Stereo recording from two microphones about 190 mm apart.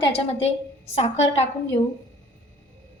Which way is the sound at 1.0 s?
35° left (ahead or behind).